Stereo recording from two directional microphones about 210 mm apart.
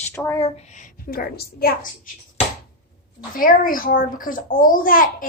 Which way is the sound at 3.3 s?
40° left (ahead or behind).